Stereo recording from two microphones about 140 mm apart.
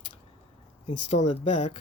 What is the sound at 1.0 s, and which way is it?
Speech, 55° left (ahead or behind).